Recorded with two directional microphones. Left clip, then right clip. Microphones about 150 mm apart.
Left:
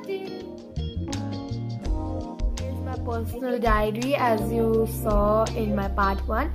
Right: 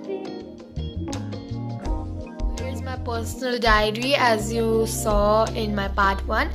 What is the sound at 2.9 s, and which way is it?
A woman's voice, 5° right (ahead or behind).